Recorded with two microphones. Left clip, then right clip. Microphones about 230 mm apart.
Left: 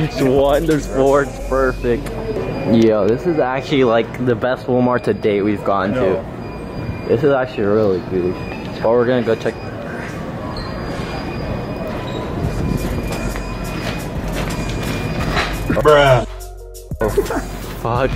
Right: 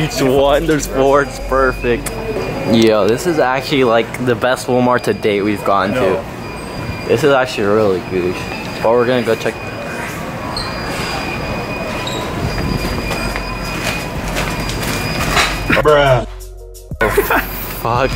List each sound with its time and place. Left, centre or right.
0.0 s speech: centre
1.2 s speech: centre
8.8 s speech: centre
11.0 s train: centre
12.7 s train: centre
13.8 s horse: centre
17.0 s a sound: centre